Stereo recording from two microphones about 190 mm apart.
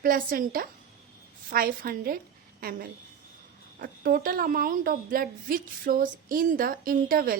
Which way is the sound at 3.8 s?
50° right (ahead or behind).